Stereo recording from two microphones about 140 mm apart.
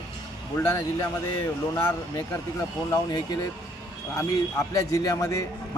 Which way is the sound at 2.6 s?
25° left (ahead or behind).